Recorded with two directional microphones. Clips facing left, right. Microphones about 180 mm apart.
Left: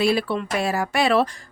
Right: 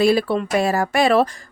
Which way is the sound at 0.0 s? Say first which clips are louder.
Right 4 dB; 40° right (ahead or behind).